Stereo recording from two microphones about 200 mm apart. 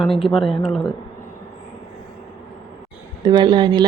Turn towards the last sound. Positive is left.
turn(degrees=-25)  # may be behind; listen again after turning